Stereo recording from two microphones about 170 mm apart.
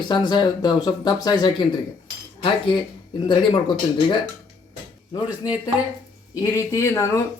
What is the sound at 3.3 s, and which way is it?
A man's voice, 30° left (ahead or behind).